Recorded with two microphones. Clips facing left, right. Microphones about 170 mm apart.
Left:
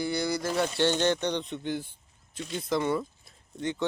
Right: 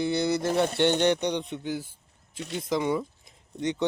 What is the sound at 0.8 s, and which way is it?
Speech, 20° right (ahead or behind).